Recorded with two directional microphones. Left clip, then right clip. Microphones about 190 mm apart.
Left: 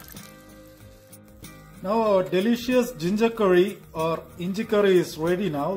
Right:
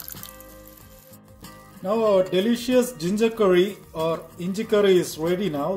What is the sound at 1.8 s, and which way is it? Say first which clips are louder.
Speech: right 2 dB; 20° left (ahead or behind).